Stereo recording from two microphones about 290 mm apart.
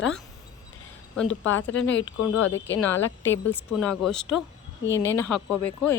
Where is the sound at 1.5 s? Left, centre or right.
Left.